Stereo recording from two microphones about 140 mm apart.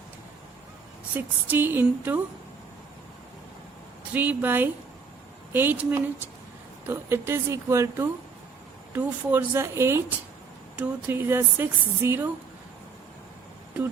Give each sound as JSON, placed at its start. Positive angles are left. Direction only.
{"t": 1.1, "sound": "speech", "side_deg": -15}
{"t": 4.1, "sound": "speech", "side_deg": -10}